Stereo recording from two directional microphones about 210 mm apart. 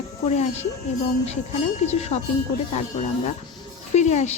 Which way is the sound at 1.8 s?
30° left (ahead or behind).